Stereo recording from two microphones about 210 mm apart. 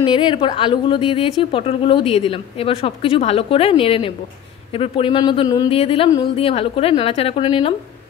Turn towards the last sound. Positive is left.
turn(degrees=25)  # may be behind; listen again after turning